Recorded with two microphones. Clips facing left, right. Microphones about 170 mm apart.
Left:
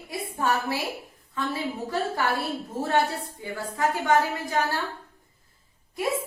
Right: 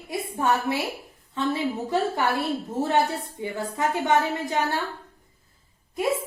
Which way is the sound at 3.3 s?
20° right (ahead or behind).